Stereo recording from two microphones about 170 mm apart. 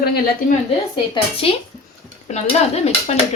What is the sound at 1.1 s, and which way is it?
Speech, 35° left (ahead or behind).